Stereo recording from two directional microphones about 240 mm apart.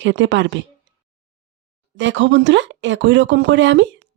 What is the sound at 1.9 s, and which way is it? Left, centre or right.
Speech, right.